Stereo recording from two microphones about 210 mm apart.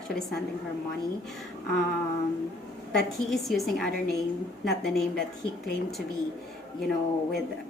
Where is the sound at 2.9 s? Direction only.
Centre (ahead or behind).